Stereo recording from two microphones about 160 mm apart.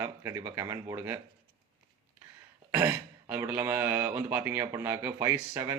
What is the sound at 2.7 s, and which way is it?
Speech, 15° right (ahead or behind).